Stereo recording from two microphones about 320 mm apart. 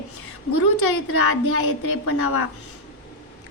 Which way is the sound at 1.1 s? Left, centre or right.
Left.